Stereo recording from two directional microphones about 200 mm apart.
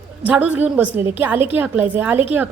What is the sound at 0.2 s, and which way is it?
A woman's voice, 10° right (ahead or behind).